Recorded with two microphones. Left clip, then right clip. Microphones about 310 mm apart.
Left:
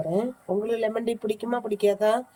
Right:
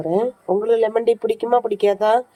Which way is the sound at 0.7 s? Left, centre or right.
Centre.